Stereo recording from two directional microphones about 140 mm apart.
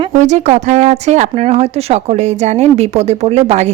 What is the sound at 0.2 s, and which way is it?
Speech, 60° right (ahead or behind).